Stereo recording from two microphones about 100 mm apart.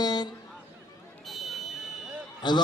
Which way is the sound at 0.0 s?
45° left (ahead or behind).